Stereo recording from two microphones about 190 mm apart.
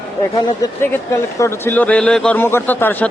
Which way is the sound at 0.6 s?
20° left (ahead or behind).